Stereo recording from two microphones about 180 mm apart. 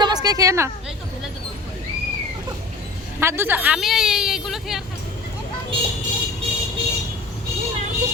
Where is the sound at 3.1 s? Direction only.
15° right (ahead or behind).